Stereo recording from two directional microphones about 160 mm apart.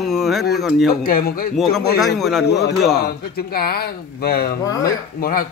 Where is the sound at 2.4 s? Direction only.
90° left.